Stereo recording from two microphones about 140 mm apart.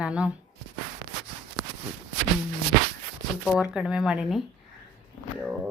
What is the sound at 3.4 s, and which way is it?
Speech, centre (ahead or behind).